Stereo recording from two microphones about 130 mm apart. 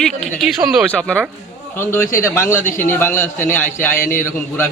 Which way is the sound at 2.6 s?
90° left.